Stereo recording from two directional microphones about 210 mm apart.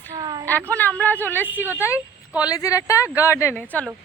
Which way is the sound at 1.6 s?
10° right (ahead or behind).